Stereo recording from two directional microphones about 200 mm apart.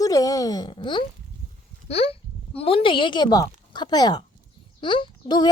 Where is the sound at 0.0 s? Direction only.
15° left (ahead or behind).